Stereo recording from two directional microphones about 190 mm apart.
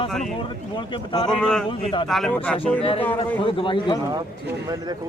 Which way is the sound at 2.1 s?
Centre (ahead or behind).